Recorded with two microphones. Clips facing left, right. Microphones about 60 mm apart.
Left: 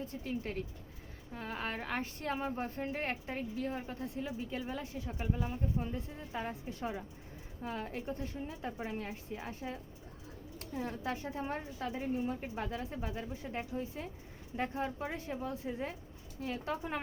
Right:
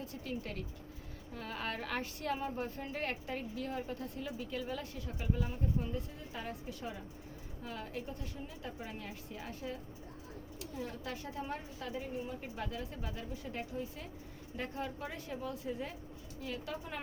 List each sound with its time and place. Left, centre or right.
0.3 s a woman's voice: left
10.6 s a woman's voice: left